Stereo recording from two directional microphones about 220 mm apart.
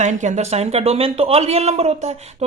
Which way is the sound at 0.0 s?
35° right (ahead or behind).